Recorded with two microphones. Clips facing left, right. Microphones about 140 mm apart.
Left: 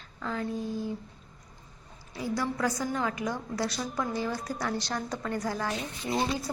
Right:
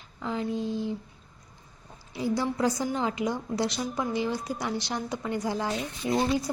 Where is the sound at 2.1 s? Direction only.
25° right (ahead or behind).